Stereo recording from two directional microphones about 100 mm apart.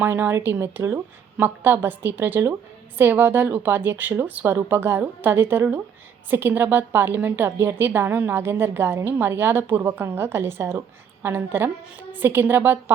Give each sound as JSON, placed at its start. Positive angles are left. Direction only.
{"t": 0.0, "sound": "a woman's voice", "side_deg": -20}